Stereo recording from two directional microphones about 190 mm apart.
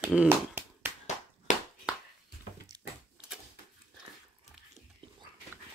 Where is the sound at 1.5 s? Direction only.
40° left (ahead or behind).